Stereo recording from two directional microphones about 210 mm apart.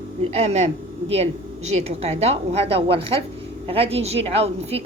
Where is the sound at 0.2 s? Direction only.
30° right (ahead or behind).